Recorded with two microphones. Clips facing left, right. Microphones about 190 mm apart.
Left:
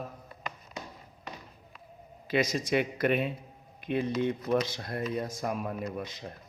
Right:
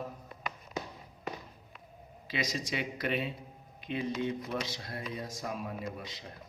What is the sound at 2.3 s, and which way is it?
Speech, 50° left (ahead or behind).